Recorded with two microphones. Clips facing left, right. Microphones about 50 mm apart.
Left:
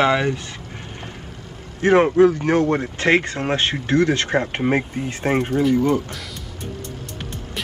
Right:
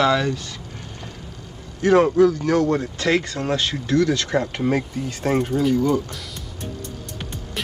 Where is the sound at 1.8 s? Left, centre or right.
Left.